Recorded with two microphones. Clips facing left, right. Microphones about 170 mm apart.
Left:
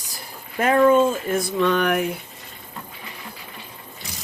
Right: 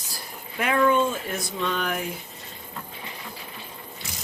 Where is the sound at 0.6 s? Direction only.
40° left (ahead or behind); by 2.1 s 65° left (ahead or behind).